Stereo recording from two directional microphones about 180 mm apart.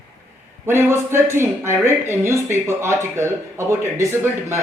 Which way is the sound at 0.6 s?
15° right (ahead or behind).